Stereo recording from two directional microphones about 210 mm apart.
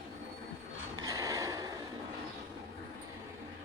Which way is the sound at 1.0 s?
15° right (ahead or behind).